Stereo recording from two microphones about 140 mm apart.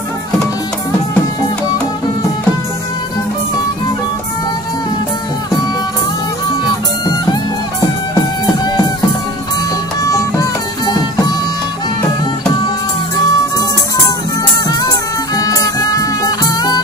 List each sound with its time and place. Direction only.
10.0 s music: 25° left (ahead or behind)
12.5 s music: 30° left (ahead or behind)
14.8 s music: 25° left (ahead or behind)